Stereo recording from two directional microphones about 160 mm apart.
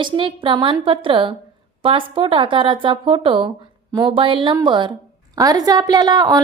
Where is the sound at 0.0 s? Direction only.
30° right (ahead or behind).